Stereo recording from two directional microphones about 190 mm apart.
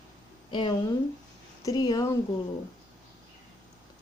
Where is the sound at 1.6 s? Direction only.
20° left (ahead or behind).